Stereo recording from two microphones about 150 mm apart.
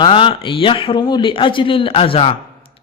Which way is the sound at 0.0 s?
35° left (ahead or behind).